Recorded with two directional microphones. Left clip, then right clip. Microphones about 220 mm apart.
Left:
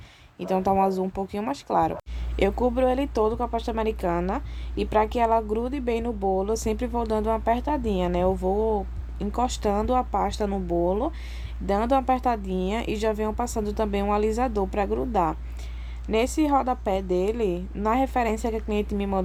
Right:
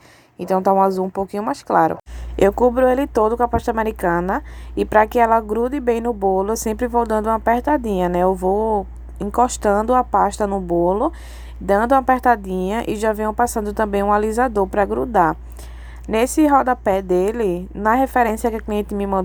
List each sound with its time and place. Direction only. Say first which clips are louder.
0.3 s a woman's voice: right 7 dB; 25° right (ahead or behind)